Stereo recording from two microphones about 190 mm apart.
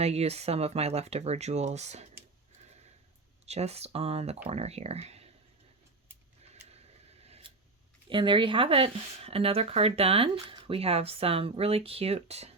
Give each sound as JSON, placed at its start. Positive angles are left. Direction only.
{"t": 0.0, "sound": "speech", "side_deg": -35}
{"t": 3.4, "sound": "speech", "side_deg": -35}
{"t": 6.4, "sound": "a sound", "side_deg": -35}
{"t": 8.1, "sound": "speech", "side_deg": -25}